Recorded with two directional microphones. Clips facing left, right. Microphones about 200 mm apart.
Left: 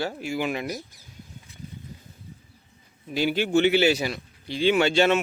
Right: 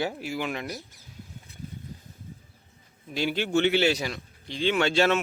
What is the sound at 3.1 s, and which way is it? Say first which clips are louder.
Speech: left 3 dB; 5° left (ahead or behind).